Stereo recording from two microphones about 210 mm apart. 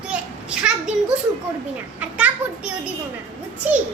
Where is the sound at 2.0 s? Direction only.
5° right (ahead or behind).